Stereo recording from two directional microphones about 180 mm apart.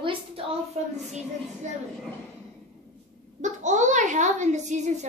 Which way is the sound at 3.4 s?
40° right (ahead or behind).